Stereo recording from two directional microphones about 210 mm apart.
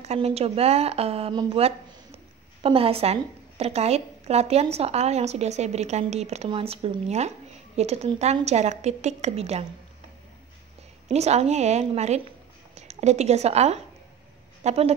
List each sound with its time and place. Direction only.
0.0 s a woman's voice: 30° right (ahead or behind)
11.1 s a woman's voice: 30° right (ahead or behind)